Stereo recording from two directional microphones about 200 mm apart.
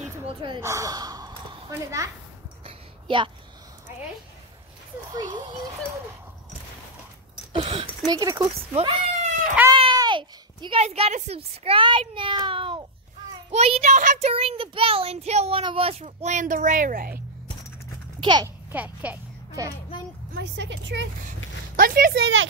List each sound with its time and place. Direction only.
0.0 s crow: 25° right (ahead or behind)
0.6 s speech: 15° right (ahead or behind)
2.6 s a sound: 25° right (ahead or behind)
5.1 s a child's voice: 20° right (ahead or behind)
7.5 s a child's voice: 25° right (ahead or behind)
8.7 s a child's voice: 30° right (ahead or behind)
14.3 s a child's voice: 30° right (ahead or behind); by 17.2 s 45° right (ahead or behind)
18.2 s a child's voice: 20° right (ahead or behind)
18.7 s a child's voice: 10° right (ahead or behind)
20.3 s speech: 60° right (ahead or behind)
21.7 s speech: 45° right (ahead or behind); by 22.5 s 65° right (ahead or behind)